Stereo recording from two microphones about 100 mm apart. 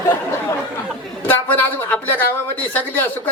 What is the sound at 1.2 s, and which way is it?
A woman's voice, 20° left (ahead or behind).